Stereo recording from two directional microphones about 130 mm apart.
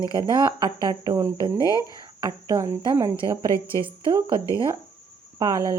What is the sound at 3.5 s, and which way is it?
Speech, 20° left (ahead or behind).